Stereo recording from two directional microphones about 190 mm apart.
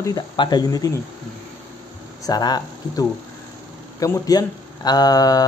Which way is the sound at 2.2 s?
20° left (ahead or behind).